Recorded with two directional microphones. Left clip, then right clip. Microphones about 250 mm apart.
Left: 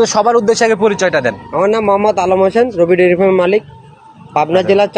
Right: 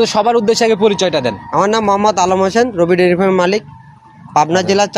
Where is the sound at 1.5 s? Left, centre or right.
Right.